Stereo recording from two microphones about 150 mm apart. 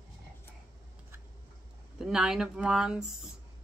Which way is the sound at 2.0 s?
5° right (ahead or behind).